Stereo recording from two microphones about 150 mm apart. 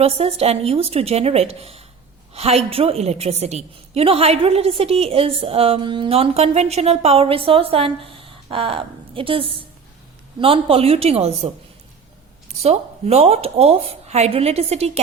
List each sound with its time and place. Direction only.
0.0 s a woman's voice: 40° right (ahead or behind)
12.6 s a woman's voice: 45° right (ahead or behind)